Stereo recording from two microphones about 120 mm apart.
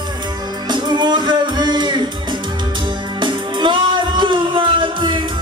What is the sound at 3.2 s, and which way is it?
Music, 40° right (ahead or behind).